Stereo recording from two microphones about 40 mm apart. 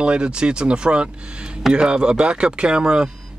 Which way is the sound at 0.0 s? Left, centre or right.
Right.